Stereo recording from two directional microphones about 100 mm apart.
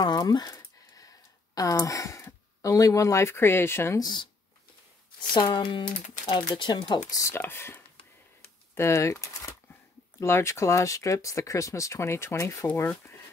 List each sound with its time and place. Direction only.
0.0 s a sound: 45° left (ahead or behind); by 4.0 s 25° left (ahead or behind)
4.0 s speech: 50° left (ahead or behind)
5.3 s speech: 50° left (ahead or behind); by 13.1 s 25° left (ahead or behind)